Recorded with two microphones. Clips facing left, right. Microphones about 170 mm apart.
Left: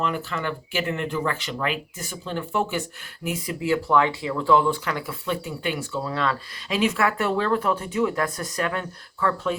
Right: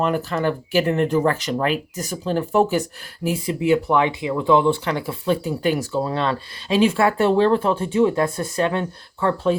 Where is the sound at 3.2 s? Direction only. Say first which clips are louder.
Right 6 dB; 30° right (ahead or behind).